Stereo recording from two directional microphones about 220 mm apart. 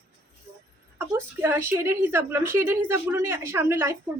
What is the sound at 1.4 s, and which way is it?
A woman's voice, 10° right (ahead or behind).